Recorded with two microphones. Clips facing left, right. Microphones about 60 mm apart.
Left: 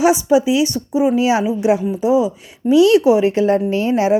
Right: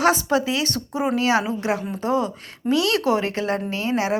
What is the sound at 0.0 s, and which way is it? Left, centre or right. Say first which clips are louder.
Speech: left 6 dB; centre.